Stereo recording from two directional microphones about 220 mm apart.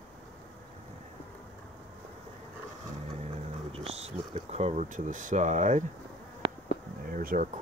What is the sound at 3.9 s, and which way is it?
Speech, 30° right (ahead or behind).